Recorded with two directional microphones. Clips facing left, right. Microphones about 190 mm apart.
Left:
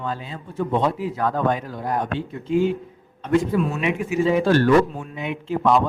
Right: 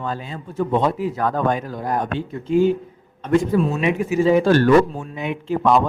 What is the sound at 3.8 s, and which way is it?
A man's voice, 35° right (ahead or behind).